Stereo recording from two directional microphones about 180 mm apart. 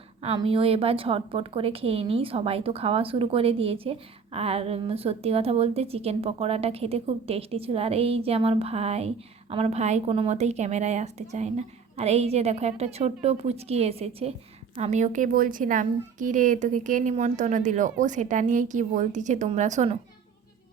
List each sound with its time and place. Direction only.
0.2 s a woman's voice: 35° right (ahead or behind)